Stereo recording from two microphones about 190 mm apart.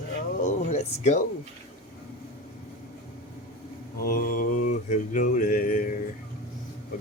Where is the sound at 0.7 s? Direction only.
35° left (ahead or behind).